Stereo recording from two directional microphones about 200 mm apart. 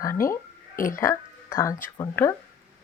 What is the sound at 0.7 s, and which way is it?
Speech, 45° left (ahead or behind).